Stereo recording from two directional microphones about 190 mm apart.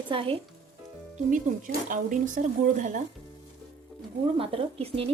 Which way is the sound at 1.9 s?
45° right (ahead or behind).